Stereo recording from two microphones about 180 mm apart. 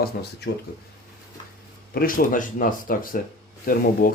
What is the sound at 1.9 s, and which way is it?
Speech, 50° left (ahead or behind).